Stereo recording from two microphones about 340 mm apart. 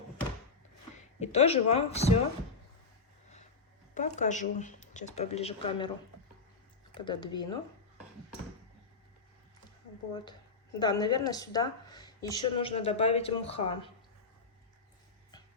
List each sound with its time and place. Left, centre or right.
1.2 s speech: centre
3.9 s speech: left
6.9 s speech: centre
10.8 s speech: centre